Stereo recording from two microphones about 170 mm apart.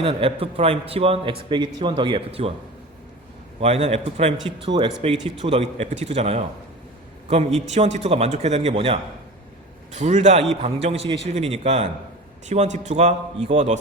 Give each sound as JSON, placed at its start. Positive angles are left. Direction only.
{"t": 0.0, "sound": "a man's voice", "side_deg": -30}
{"t": 3.6, "sound": "a man's voice", "side_deg": -35}